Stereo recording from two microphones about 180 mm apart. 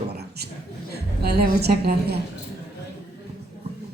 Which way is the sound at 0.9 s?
60° right (ahead or behind).